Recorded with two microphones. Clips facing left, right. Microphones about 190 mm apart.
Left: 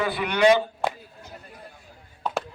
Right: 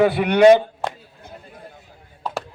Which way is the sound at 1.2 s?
50° right (ahead or behind).